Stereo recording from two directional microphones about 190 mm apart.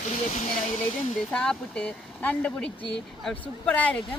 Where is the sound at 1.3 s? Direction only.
5° left (ahead or behind).